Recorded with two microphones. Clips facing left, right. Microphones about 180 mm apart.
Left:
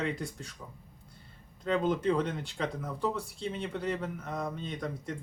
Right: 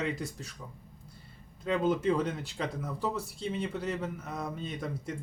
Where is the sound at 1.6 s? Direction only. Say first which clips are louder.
Right 1 dB; 5° right (ahead or behind).